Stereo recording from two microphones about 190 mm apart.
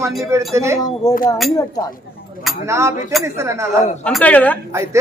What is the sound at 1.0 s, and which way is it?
Speech, 20° left (ahead or behind).